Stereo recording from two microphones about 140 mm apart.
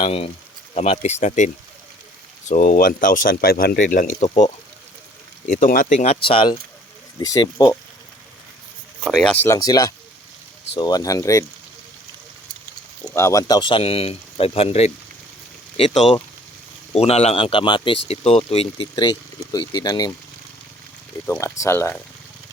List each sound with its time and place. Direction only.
0.0 s speech: 45° left (ahead or behind)
2.5 s speech: 70° left (ahead or behind)
5.5 s speech: 80° left; by 6.1 s 60° left (ahead or behind)
6.2 s speech: 35° left (ahead or behind)
7.2 s speech: 25° left (ahead or behind)
9.0 s speech: centre (ahead or behind)
9.3 s speech: 15° left (ahead or behind)
9.6 s speech: 25° left (ahead or behind)
13.1 s speech: 20° left (ahead or behind)
21.2 s speech: 20° left (ahead or behind)